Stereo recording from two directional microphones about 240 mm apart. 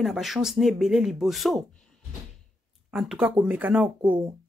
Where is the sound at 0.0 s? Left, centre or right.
Centre.